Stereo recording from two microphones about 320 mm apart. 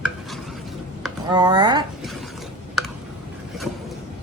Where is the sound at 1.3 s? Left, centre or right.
Centre.